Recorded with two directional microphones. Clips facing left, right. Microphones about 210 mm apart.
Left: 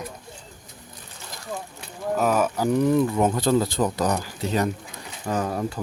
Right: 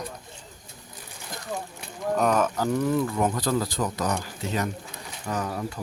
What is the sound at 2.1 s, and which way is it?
Speech, 5° left (ahead or behind).